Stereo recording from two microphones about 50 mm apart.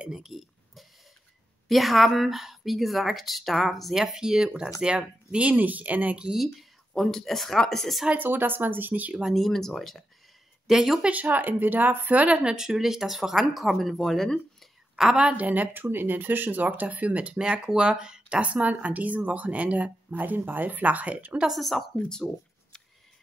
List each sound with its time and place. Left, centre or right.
0.1 s a sound: centre
1.7 s speech: centre; by 6.1 s right
6.3 s speech: centre
8.2 s speech: right
9.3 s speech: centre
10.7 s speech: centre
11.0 s speech: right
12.1 s speech: right
12.5 s speech: centre
15.1 s speech: right
17.4 s speech: centre
18.4 s speech: right
21.5 s speech: centre
22.1 s a sound: centre